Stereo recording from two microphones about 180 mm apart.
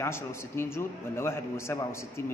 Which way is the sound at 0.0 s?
15° left (ahead or behind).